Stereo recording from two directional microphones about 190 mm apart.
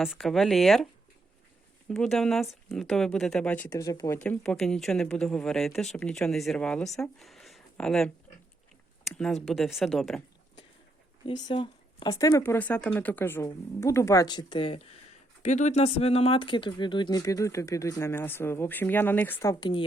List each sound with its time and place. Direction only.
0.0 s speech: centre (ahead or behind)
1.9 s speech: centre (ahead or behind)
9.1 s speech: centre (ahead or behind)
11.3 s speech: 25° left (ahead or behind)
15.4 s speech: 40° left (ahead or behind); by 19.8 s 20° left (ahead or behind)